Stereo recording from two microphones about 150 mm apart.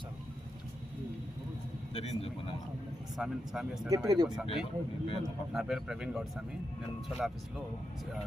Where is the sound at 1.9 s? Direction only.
45° left (ahead or behind).